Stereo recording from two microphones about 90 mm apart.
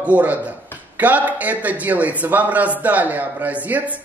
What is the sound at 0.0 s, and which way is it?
A man's voice, 15° right (ahead or behind).